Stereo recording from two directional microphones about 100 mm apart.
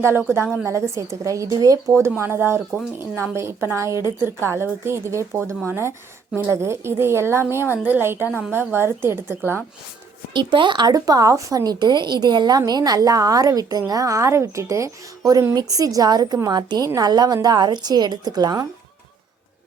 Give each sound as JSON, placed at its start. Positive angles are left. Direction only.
{"t": 0.0, "sound": "speech", "side_deg": -25}
{"t": 10.3, "sound": "speech", "side_deg": -55}